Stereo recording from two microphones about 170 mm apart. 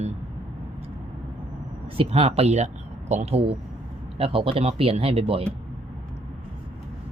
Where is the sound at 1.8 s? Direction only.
35° right (ahead or behind).